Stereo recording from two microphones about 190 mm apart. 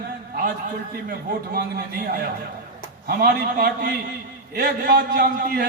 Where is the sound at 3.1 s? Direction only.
55° right (ahead or behind).